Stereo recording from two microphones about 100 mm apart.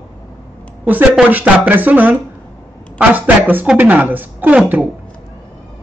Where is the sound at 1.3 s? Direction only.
15° right (ahead or behind).